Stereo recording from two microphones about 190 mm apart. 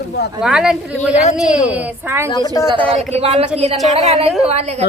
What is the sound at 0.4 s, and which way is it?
A woman's voice, 5° right (ahead or behind).